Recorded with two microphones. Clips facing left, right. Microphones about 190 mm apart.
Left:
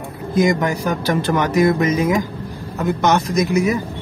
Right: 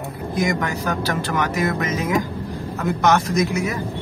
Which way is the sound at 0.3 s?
20° left (ahead or behind).